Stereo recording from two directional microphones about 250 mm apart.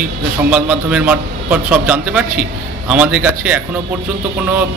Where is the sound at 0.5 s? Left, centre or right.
Centre.